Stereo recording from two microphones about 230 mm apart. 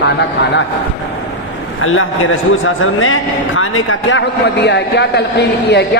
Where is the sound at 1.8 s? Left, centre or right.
Left.